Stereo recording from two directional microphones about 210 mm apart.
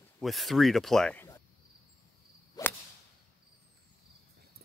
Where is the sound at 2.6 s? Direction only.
20° left (ahead or behind).